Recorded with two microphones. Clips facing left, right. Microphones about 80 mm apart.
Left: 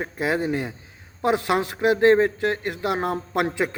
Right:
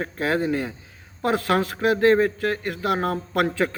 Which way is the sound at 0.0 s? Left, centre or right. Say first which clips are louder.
Right 1 dB; centre.